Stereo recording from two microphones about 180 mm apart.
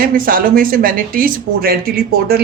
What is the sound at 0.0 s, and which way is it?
Speech, 50° right (ahead or behind).